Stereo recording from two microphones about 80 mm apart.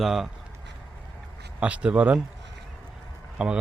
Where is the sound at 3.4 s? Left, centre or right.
Centre.